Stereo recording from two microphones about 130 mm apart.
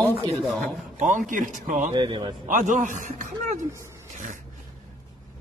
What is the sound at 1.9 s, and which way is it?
Speech, 40° right (ahead or behind).